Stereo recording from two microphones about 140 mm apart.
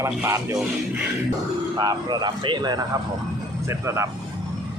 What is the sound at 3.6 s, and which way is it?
Speech, 20° right (ahead or behind).